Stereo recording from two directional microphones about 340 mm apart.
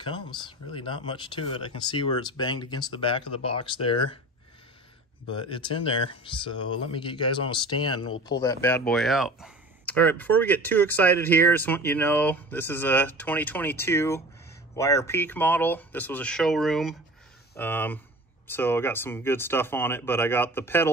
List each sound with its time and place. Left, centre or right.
0.0 s speech: centre
5.4 s speech: centre